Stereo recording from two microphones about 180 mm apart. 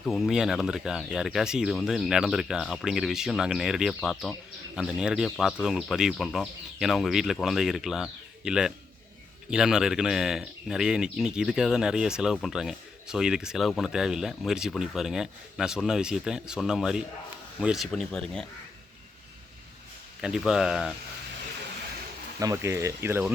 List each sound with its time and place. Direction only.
0.0 s speech: centre (ahead or behind)
20.2 s speech: 5° right (ahead or behind)
22.4 s speech: 15° right (ahead or behind)